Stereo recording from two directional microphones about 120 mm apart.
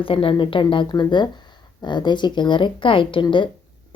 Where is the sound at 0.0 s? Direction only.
50° left (ahead or behind).